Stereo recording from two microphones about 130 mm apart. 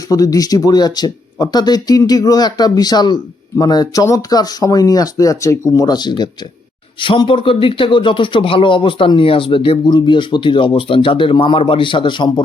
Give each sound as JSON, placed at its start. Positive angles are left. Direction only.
{"t": 0.1, "sound": "a man's voice", "side_deg": 30}